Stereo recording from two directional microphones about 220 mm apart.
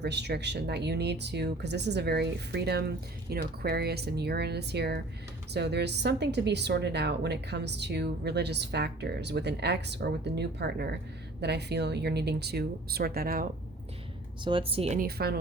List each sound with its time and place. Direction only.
0.0 s a woman's voice: 50° right (ahead or behind)
14.4 s speech: 25° right (ahead or behind)
14.9 s a woman's voice: 45° right (ahead or behind)